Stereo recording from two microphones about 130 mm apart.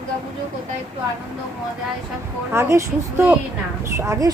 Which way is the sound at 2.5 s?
20° right (ahead or behind).